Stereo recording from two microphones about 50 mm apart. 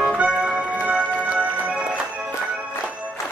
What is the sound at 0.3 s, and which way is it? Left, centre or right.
Music, right.